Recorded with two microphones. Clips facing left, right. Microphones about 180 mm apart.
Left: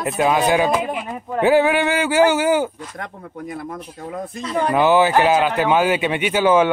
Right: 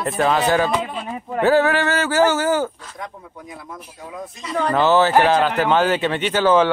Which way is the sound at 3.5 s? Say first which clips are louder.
Left 7 dB; 55° left (ahead or behind).